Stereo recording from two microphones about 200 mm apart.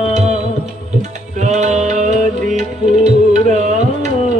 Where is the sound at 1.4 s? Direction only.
35° right (ahead or behind).